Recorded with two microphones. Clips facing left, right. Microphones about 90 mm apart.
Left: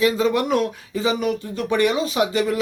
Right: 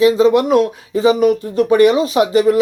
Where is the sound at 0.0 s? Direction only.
20° right (ahead or behind).